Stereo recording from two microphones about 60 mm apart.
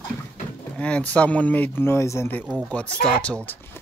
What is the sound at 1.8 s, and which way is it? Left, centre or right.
Speech, left.